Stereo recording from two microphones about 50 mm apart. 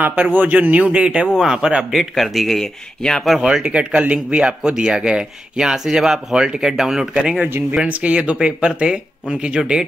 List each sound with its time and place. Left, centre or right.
0.0 s speech: right; by 1.9 s centre
2.1 s speech: centre
3.3 s speech: centre
7.3 s speech: right
7.9 s speech: right